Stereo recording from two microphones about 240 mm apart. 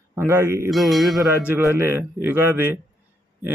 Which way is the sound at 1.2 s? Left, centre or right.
Centre.